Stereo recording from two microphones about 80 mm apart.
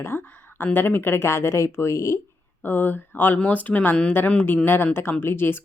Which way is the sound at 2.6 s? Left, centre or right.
Left.